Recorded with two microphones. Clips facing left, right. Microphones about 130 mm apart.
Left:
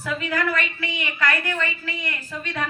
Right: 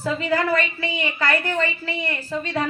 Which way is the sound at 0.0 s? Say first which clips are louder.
Right 3 dB; 30° right (ahead or behind).